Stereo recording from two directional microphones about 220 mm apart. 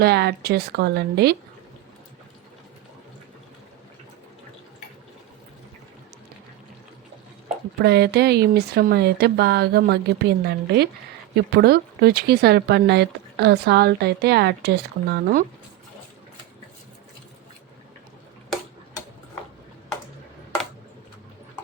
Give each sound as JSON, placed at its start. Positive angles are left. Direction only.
{"t": 0.0, "sound": "speech", "side_deg": -50}
{"t": 7.8, "sound": "speech", "side_deg": -50}